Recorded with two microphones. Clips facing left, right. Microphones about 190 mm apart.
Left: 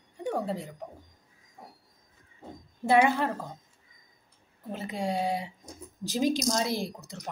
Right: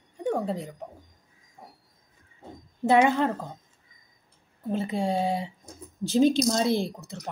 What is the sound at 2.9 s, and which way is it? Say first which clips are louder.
Speech: right 2 dB; 15° right (ahead or behind).